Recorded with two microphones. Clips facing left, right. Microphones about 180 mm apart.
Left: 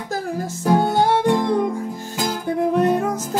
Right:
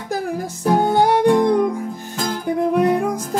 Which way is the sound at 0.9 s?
15° right (ahead or behind).